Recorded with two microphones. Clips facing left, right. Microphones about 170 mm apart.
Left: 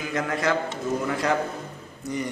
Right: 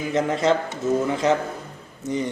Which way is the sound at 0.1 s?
25° right (ahead or behind).